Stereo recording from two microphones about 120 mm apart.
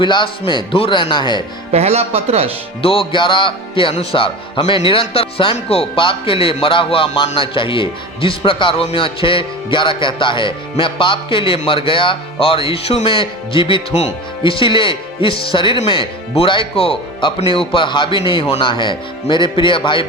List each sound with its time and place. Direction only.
0.0 s speech: 40° left (ahead or behind)
1.7 s speech: 60° right (ahead or behind)
2.8 s speech: 50° left (ahead or behind)